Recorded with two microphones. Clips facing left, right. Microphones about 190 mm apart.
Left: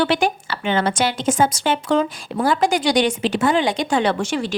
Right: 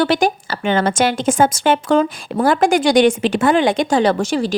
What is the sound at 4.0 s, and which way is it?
Speech, 40° right (ahead or behind).